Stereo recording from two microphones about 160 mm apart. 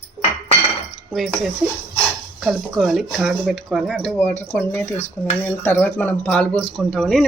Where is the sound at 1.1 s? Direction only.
Centre (ahead or behind).